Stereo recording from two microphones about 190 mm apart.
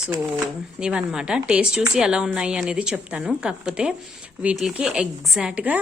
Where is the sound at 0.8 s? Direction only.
5° right (ahead or behind).